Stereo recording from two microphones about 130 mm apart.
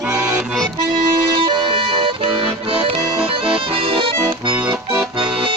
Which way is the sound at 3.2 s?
45° right (ahead or behind).